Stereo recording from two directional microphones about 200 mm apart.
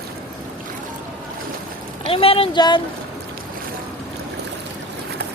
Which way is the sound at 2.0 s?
30° left (ahead or behind).